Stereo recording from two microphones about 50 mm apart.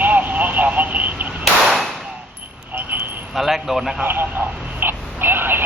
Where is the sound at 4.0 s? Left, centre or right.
Right.